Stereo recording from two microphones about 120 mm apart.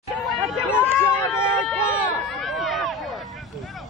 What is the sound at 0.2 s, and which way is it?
Chatter, centre (ahead or behind).